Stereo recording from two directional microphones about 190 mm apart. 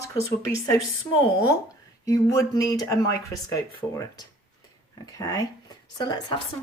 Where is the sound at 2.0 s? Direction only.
15° left (ahead or behind).